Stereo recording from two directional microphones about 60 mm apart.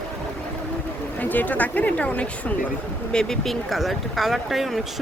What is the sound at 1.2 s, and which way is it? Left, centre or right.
Speech, left.